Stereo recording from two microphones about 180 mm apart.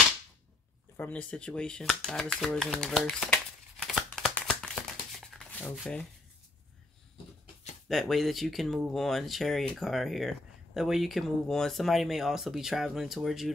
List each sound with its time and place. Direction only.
0.9 s speech: 10° left (ahead or behind)
7.9 s speech: centre (ahead or behind)